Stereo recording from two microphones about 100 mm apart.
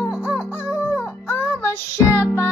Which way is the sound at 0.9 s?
25° left (ahead or behind).